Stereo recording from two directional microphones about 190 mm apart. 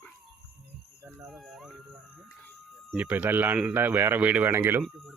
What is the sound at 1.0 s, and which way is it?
Speech, centre (ahead or behind).